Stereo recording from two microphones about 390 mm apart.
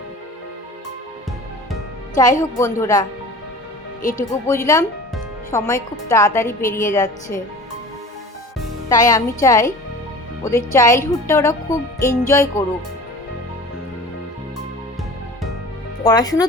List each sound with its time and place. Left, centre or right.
2.4 s speech: centre
4.0 s speech: centre
4.4 s speech: centre
8.9 s speech: centre
16.0 s speech: centre